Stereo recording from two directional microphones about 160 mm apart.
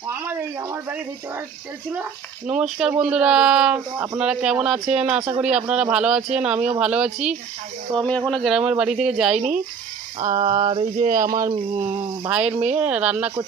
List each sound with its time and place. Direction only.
0.1 s speech: 10° right (ahead or behind)
2.5 s speech: 5° right (ahead or behind)
7.9 s speech: 30° right (ahead or behind)
8.3 s speech: centre (ahead or behind)
10.3 s a sound: 55° right (ahead or behind)
10.6 s speech: 35° right (ahead or behind)
10.9 s speech: 55° right (ahead or behind)
12.3 s speech: 10° right (ahead or behind)